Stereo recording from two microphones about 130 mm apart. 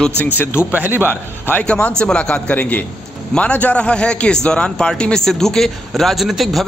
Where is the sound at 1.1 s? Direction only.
10° left (ahead or behind).